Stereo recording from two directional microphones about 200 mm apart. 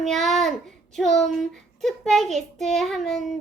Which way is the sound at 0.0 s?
Centre (ahead or behind).